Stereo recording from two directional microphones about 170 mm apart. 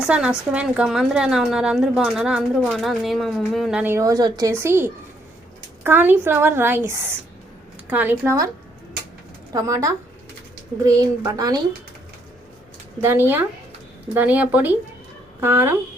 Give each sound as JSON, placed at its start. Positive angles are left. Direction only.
{"t": 0.0, "sound": "a woman's voice", "side_deg": -5}
{"t": 9.5, "sound": "speech", "side_deg": -20}
{"t": 13.0, "sound": "a woman's voice", "side_deg": -15}